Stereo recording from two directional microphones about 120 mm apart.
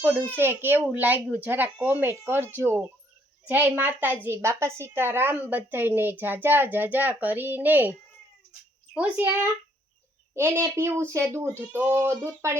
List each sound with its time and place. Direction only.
0.3 s a woman's voice: 15° right (ahead or behind)
9.0 s a woman's voice: 10° right (ahead or behind)